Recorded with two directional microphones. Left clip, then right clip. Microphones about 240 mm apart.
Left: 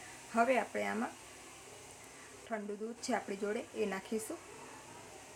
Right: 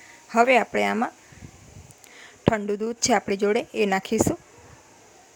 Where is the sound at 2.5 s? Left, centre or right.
Right.